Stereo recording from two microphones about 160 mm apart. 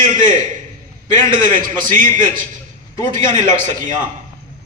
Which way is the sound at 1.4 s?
55° right (ahead or behind).